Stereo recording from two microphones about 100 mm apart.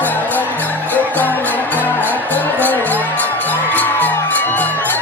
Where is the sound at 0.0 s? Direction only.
15° left (ahead or behind).